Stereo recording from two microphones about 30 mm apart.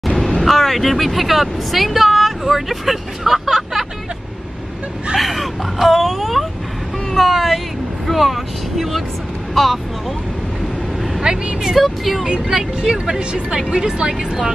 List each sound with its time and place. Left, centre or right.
0.4 s speech: centre
5.1 s speech: centre
11.3 s speech: right
11.7 s speech: centre
12.3 s speech: right